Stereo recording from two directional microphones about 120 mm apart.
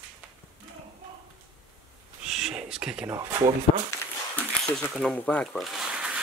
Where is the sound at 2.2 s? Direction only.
5° right (ahead or behind).